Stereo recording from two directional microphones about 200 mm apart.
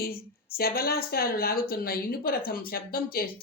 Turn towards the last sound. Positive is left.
turn(degrees=50)  # may be behind; listen again after turning